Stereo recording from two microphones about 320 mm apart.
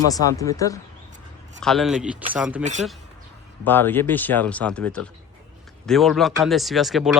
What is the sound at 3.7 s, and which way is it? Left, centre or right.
A man's voice, centre.